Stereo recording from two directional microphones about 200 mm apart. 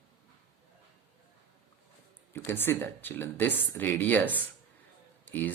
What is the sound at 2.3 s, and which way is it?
Speech, 10° left (ahead or behind).